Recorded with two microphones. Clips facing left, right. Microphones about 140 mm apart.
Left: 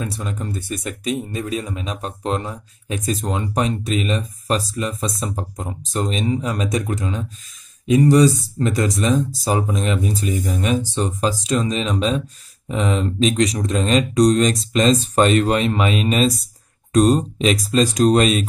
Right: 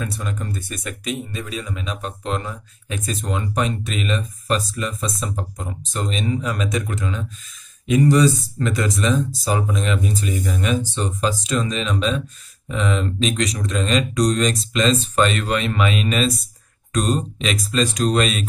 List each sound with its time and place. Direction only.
0.0 s speech: 25° left (ahead or behind)
8.6 s speech: 35° left (ahead or behind)